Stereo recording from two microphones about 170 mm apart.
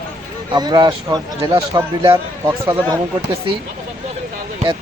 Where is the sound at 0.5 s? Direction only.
25° right (ahead or behind).